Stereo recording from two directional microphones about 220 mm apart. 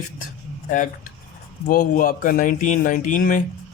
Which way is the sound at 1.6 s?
40° left (ahead or behind).